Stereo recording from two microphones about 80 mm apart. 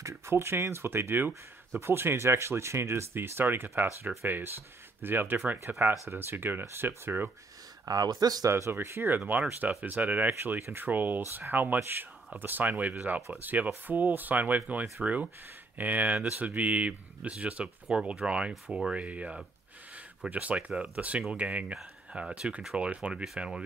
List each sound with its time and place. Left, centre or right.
0.0 s speech: right
7.8 s speech: right
8.5 s speech: right; by 23.6 s centre